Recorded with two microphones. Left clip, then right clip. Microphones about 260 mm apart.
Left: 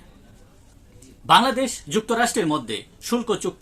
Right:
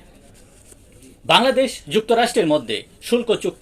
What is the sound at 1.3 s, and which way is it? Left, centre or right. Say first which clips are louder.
Speech: right 2 dB; centre.